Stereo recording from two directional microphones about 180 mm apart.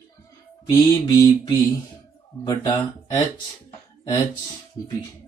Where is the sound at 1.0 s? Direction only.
20° left (ahead or behind).